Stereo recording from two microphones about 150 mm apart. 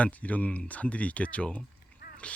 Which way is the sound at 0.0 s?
10° left (ahead or behind).